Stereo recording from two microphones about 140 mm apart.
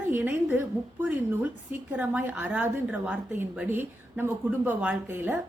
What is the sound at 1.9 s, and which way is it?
A woman's voice, 15° right (ahead or behind).